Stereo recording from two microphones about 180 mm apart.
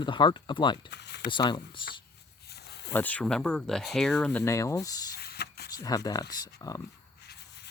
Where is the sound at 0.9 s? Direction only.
70° left (ahead or behind).